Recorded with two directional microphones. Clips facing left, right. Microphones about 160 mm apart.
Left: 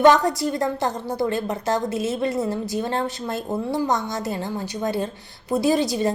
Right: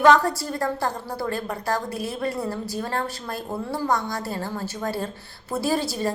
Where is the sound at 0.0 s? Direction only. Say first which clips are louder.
Left 2 dB; 20° left (ahead or behind).